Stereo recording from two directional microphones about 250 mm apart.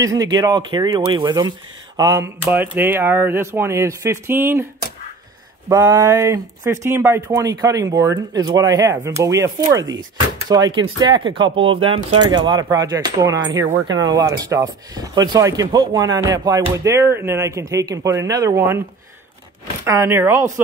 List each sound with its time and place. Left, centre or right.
0.0 s speech: centre
5.7 s speech: centre
19.8 s speech: centre